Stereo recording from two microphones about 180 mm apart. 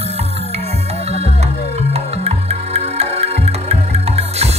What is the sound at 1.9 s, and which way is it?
Music, 35° right (ahead or behind).